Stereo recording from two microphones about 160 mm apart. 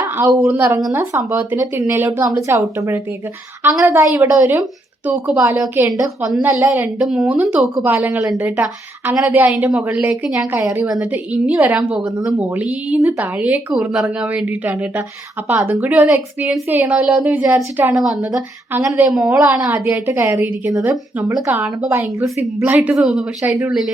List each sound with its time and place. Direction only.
0.2 s speech: 15° right (ahead or behind)
5.9 s a woman's voice: centre (ahead or behind)